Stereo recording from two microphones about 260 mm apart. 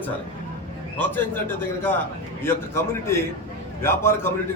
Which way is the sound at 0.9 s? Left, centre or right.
Centre.